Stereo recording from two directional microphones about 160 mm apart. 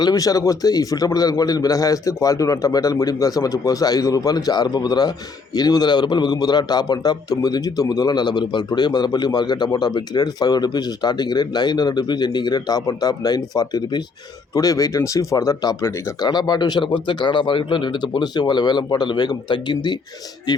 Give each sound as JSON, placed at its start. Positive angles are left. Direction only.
{"t": 0.0, "sound": "a man's voice", "side_deg": 20}